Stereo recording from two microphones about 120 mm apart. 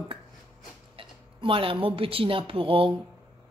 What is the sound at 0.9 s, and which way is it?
Speech, 50° right (ahead or behind).